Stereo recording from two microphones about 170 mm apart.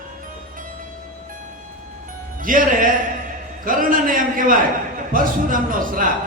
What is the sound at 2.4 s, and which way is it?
Speech, 55° right (ahead or behind).